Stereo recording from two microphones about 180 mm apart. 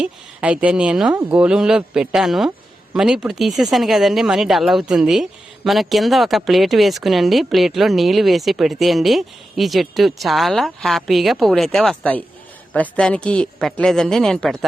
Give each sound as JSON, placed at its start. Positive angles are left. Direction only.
{"t": 0.0, "sound": "speech", "side_deg": -5}